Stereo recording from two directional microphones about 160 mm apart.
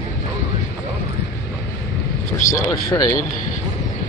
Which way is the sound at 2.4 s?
50° left (ahead or behind).